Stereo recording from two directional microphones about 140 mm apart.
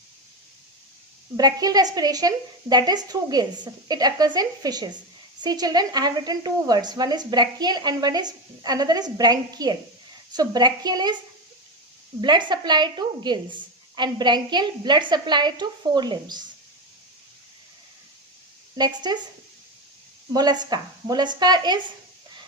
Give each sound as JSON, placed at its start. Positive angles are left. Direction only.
{"t": 1.4, "sound": "speech", "side_deg": -25}
{"t": 12.2, "sound": "a woman's voice", "side_deg": -35}
{"t": 18.8, "sound": "a woman's voice", "side_deg": -30}
{"t": 20.3, "sound": "a woman's voice", "side_deg": -30}